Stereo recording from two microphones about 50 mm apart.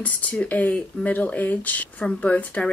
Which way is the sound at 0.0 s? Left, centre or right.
Left.